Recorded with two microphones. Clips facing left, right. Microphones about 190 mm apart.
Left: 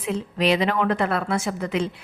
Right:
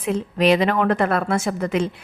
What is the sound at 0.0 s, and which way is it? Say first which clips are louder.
A woman's voice: right 4 dB; 50° right (ahead or behind).